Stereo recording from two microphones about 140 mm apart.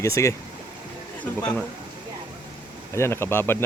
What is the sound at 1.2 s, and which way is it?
Speech, 10° left (ahead or behind).